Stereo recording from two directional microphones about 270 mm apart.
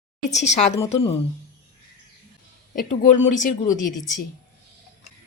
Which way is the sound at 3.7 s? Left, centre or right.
Left.